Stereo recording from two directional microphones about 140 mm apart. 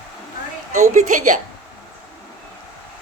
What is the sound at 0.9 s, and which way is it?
Speech, 65° right (ahead or behind).